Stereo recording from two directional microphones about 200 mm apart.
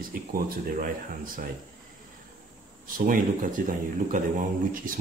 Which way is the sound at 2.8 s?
45° right (ahead or behind).